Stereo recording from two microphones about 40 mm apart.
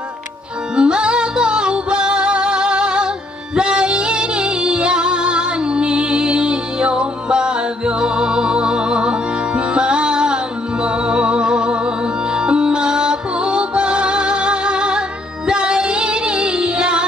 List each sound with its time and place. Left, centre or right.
0.7 s music: right